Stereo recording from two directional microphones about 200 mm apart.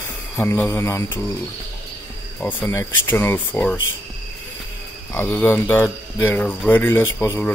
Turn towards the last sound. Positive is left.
turn(degrees=10)  # may be behind; listen again after turning